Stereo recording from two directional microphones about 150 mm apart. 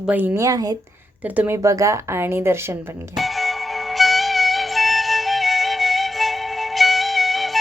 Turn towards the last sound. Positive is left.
turn(degrees=0)  # may be behind; listen again after turning